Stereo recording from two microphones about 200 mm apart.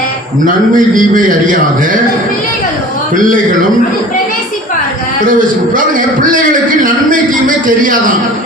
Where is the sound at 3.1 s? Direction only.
40° right (ahead or behind).